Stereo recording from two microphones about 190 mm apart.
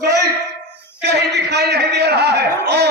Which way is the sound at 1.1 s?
60° right (ahead or behind).